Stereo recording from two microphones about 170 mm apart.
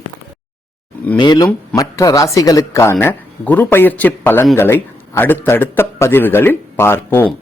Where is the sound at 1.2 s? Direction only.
25° left (ahead or behind).